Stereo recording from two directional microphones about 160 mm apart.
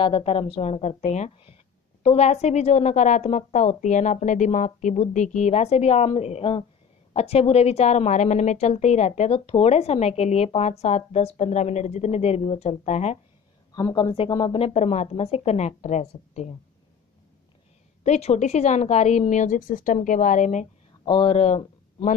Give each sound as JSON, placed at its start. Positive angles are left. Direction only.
{"t": 0.0, "sound": "a woman's voice", "side_deg": 35}
{"t": 13.7, "sound": "speech", "side_deg": 25}
{"t": 18.0, "sound": "a woman's voice", "side_deg": 45}
{"t": 21.0, "sound": "speech", "side_deg": 30}